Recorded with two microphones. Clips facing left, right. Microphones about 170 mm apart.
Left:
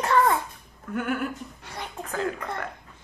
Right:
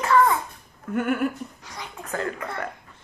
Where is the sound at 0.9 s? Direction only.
Centre (ahead or behind).